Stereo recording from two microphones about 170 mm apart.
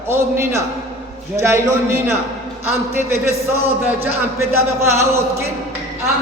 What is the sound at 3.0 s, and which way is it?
Speech, 15° right (ahead or behind).